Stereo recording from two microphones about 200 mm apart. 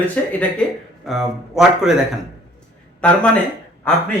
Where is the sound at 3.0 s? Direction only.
5° left (ahead or behind).